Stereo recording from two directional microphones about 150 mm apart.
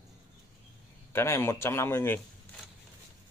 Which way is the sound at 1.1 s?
15° left (ahead or behind).